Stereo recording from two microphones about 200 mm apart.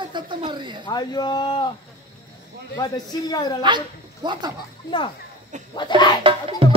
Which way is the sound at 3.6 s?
20° right (ahead or behind).